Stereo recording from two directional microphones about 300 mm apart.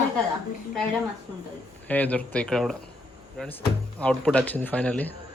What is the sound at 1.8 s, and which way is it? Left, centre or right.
Speech, centre.